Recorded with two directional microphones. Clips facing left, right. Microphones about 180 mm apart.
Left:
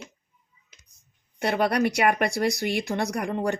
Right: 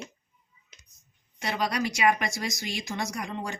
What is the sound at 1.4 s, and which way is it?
Speech, 60° left (ahead or behind).